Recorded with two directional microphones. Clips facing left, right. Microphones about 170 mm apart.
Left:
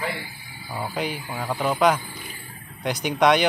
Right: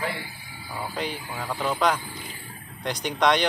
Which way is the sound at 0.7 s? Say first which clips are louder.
Left 3 dB; 10° left (ahead or behind).